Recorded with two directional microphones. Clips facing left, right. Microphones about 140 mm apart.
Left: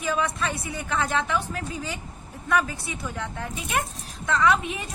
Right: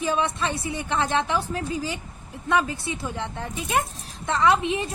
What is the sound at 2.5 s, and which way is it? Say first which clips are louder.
A woman's voice: right 2 dB; 25° right (ahead or behind).